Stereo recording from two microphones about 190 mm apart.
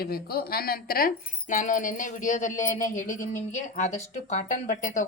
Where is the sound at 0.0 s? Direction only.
55° left (ahead or behind).